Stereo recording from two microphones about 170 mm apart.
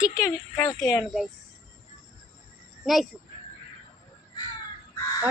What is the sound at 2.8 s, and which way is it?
Speech, centre (ahead or behind).